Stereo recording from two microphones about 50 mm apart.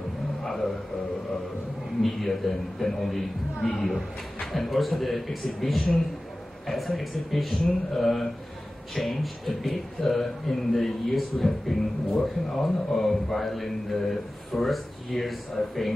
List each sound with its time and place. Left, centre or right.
0.4 s a sound: centre
2.0 s a man's voice: centre
4.4 s a man's voice: centre